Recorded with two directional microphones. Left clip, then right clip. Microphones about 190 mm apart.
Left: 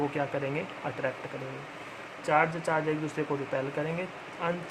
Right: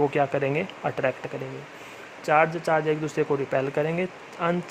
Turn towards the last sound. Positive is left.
turn(degrees=-50)  # may be behind; listen again after turning